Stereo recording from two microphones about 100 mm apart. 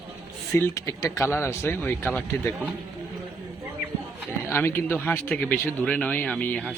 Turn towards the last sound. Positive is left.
turn(degrees=10)  # may be behind; listen again after turning